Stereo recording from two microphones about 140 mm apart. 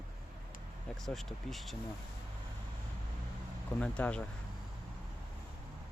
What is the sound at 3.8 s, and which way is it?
Speech, 10° left (ahead or behind).